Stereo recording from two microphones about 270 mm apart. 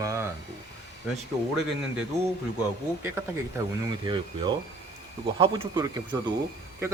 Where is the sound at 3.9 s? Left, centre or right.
Centre.